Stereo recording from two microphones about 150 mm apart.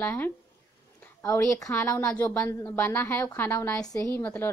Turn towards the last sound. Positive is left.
turn(degrees=15)  # may be behind; listen again after turning